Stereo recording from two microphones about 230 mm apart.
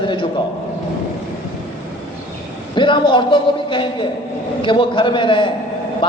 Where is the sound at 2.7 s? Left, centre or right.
Left.